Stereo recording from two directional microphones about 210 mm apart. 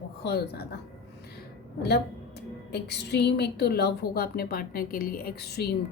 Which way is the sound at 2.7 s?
55° left (ahead or behind).